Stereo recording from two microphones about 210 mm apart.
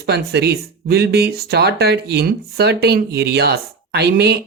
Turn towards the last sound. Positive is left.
turn(degrees=-50)  # may be behind; listen again after turning